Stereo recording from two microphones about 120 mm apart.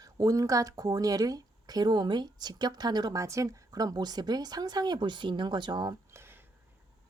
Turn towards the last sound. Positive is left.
turn(degrees=-35)  # may be behind; listen again after turning